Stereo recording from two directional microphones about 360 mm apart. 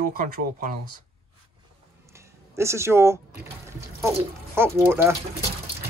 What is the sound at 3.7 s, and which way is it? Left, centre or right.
Speech, centre.